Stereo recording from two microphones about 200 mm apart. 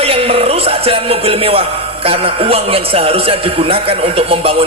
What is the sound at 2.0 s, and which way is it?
A man's voice, 30° right (ahead or behind).